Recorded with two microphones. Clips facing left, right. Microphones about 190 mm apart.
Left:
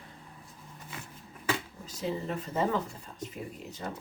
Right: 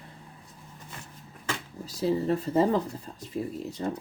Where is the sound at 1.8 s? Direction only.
35° right (ahead or behind).